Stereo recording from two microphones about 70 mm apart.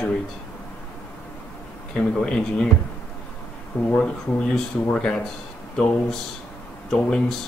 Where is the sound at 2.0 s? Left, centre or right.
Centre.